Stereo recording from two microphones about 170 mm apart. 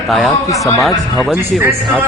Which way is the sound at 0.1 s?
Centre (ahead or behind).